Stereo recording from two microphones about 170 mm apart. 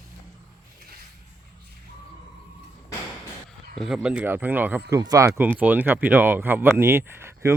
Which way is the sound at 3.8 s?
5° right (ahead or behind).